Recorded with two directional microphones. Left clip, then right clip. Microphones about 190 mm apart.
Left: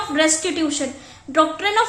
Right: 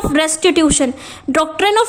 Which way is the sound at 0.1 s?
60° right (ahead or behind).